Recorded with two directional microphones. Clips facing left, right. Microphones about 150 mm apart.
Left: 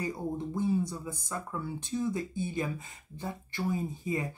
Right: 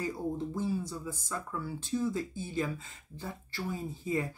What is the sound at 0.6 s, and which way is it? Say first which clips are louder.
Speech: left 4 dB; 20° left (ahead or behind).